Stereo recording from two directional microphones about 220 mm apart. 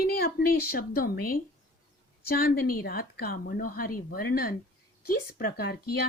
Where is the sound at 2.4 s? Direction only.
40° left (ahead or behind).